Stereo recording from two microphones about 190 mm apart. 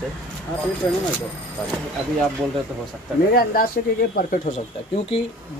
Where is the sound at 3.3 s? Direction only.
50° left (ahead or behind).